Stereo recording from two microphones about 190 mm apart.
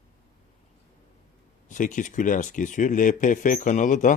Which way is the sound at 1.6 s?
40° left (ahead or behind).